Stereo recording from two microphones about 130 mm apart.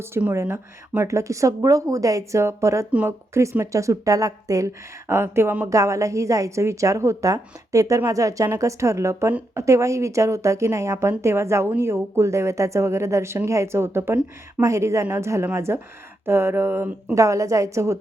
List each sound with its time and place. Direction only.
0.0 s a woman's voice: 15° right (ahead or behind)
16.2 s a sound: 20° right (ahead or behind)
17.2 s a woman's voice: 25° right (ahead or behind)